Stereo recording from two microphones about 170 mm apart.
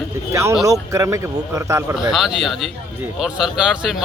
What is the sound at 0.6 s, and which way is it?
Speech, 20° right (ahead or behind).